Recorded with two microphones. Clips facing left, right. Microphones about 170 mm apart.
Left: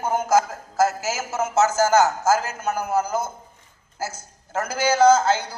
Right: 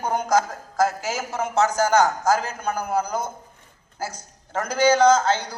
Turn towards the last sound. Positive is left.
turn(degrees=10)  # may be behind; listen again after turning